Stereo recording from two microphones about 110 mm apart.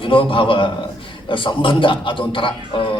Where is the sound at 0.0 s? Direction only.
50° left (ahead or behind).